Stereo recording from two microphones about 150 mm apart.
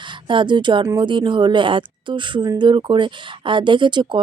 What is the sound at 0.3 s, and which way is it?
A woman's voice, 30° right (ahead or behind).